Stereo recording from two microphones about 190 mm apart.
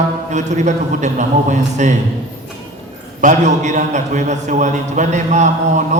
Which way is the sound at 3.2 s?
40° right (ahead or behind).